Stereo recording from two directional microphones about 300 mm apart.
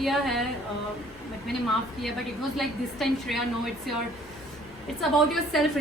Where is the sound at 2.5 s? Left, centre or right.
Centre.